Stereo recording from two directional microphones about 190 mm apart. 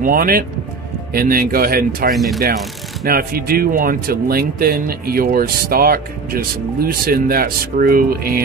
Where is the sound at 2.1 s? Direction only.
Centre (ahead or behind).